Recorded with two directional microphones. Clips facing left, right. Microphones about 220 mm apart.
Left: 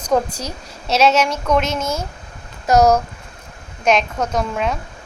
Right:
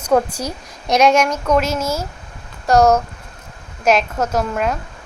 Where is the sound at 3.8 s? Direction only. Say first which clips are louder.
Right 1 dB; 5° right (ahead or behind).